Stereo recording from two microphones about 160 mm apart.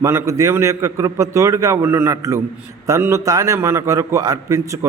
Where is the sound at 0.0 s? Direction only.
15° right (ahead or behind).